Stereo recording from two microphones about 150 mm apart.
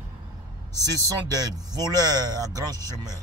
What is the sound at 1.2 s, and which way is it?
Speech, 25° right (ahead or behind).